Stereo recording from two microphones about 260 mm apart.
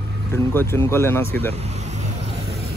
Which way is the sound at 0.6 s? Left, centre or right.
Centre.